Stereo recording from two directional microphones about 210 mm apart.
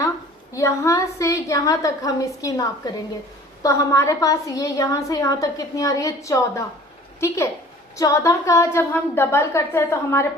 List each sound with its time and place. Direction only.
0.5 s a woman's voice: 15° left (ahead or behind)